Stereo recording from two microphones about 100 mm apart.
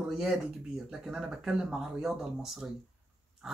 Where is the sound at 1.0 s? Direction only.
5° right (ahead or behind).